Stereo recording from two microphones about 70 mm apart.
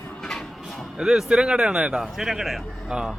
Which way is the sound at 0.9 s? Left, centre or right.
Centre.